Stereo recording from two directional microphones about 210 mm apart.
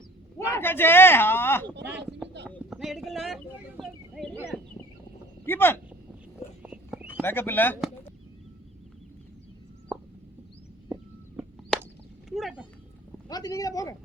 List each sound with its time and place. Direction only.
0.3 s speech: 10° left (ahead or behind)
5.5 s speech: 10° left (ahead or behind)
6.6 s a sound: 5° right (ahead or behind)
7.2 s speech: 10° left (ahead or behind)
9.9 s plop: centre (ahead or behind)
11.4 s a sound: 10° right (ahead or behind)
13.2 s speech: 20° left (ahead or behind)